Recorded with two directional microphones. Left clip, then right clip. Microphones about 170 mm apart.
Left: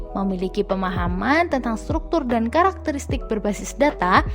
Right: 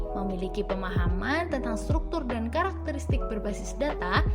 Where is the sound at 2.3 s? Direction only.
50° left (ahead or behind).